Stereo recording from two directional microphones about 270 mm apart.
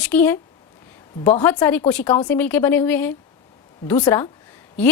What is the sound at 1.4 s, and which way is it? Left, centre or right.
A woman's voice, centre.